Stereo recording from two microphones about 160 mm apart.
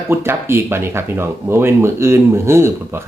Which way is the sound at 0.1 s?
15° right (ahead or behind).